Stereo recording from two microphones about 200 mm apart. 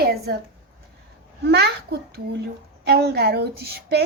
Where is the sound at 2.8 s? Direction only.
55° right (ahead or behind).